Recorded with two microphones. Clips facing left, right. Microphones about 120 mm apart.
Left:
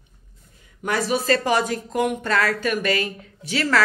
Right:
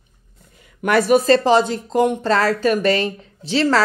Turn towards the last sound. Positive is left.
turn(degrees=-30)  # may be behind; listen again after turning